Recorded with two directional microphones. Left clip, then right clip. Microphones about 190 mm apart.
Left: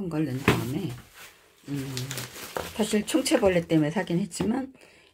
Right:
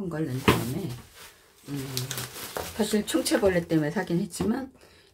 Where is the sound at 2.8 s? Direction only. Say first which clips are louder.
Even; 15° left (ahead or behind).